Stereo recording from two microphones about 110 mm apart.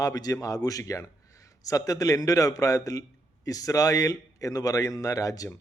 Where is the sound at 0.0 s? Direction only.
35° left (ahead or behind).